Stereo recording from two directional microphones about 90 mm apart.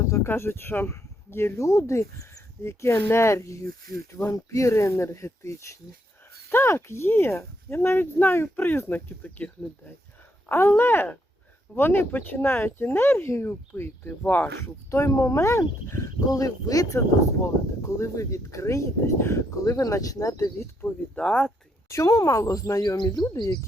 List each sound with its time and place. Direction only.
0.1 s speech: 30° left (ahead or behind)
14.8 s speech: 35° left (ahead or behind)
20.8 s speech: 10° left (ahead or behind)
21.8 s speech: 35° left (ahead or behind)
23.0 s speech: 50° left (ahead or behind)